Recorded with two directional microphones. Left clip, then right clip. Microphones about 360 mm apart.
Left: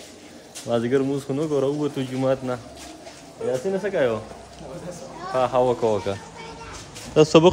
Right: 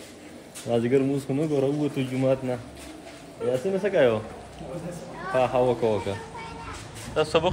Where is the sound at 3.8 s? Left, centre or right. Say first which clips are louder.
Right 3 dB; centre.